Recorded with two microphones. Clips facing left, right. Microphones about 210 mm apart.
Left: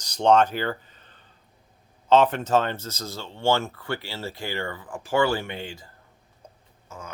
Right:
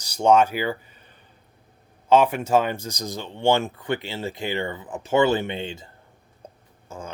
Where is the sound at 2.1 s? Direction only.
10° right (ahead or behind).